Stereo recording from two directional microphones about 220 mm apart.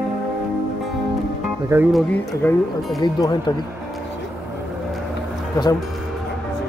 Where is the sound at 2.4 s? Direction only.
10° left (ahead or behind).